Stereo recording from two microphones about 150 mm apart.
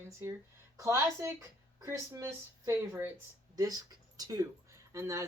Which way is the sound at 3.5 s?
25° right (ahead or behind).